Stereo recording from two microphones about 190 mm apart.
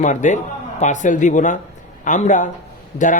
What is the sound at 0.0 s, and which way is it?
A man's voice, 40° left (ahead or behind).